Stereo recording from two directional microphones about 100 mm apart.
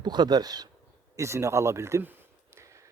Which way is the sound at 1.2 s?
30° right (ahead or behind).